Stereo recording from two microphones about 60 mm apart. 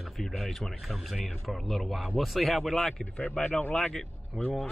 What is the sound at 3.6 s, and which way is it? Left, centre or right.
Speech, left.